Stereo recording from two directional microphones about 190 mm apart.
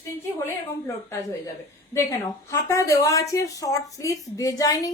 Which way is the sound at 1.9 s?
15° left (ahead or behind).